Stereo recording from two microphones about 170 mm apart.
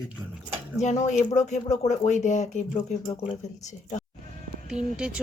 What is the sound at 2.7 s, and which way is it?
Speech, 25° left (ahead or behind).